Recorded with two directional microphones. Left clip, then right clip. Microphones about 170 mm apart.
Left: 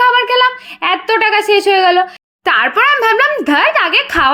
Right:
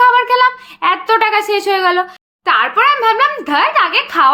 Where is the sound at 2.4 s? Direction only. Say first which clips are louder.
Even; 45° left (ahead or behind).